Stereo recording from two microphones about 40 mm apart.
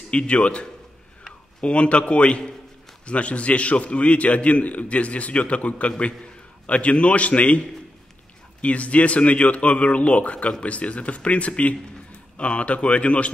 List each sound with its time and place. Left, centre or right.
0.1 s a man's voice: left